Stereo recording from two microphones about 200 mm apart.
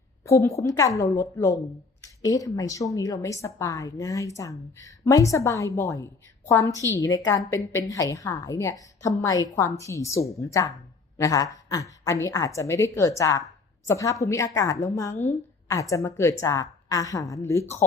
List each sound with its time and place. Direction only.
0.3 s a woman's voice: 15° left (ahead or behind)